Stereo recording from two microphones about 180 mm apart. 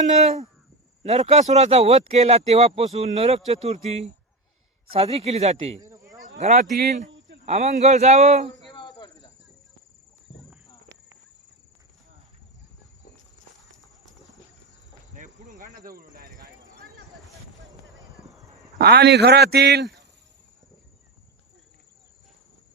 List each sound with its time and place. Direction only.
0.0 s speech: 40° right (ahead or behind)
5.8 s insect: 20° right (ahead or behind)
6.2 s a man's voice: 40° right (ahead or behind)
8.7 s cricket: 25° left (ahead or behind)
10.3 s walk: 35° left (ahead or behind)
15.1 s cricket: 45° right (ahead or behind)
18.8 s a man's voice: 65° right (ahead or behind)